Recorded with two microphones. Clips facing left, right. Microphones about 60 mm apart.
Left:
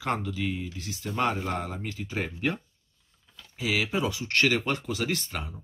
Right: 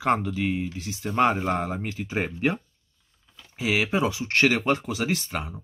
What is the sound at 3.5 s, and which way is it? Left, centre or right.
Speech, right.